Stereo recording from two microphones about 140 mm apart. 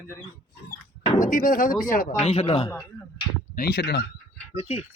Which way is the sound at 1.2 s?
75° left (ahead or behind).